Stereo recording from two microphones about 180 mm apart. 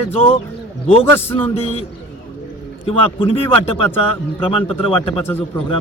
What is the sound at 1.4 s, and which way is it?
A man's voice, 35° left (ahead or behind).